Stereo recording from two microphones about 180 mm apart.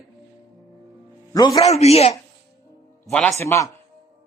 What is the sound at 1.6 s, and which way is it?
Speech, 35° left (ahead or behind).